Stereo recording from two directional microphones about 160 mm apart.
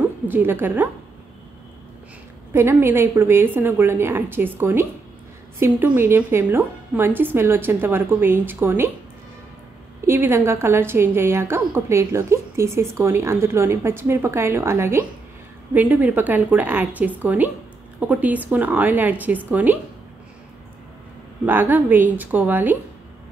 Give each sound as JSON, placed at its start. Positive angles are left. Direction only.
{"t": 0.3, "sound": "a woman's voice", "side_deg": -10}
{"t": 2.5, "sound": "a woman's voice", "side_deg": -15}
{"t": 10.0, "sound": "a woman's voice", "side_deg": -15}
{"t": 21.5, "sound": "a woman's voice", "side_deg": -10}